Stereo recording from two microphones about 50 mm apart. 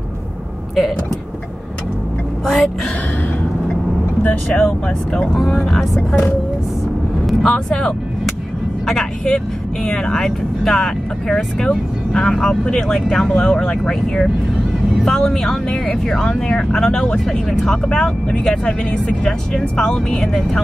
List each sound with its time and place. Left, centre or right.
2.4 s speech: centre
4.2 s speech: left
5.3 s speech: centre
7.4 s speech: centre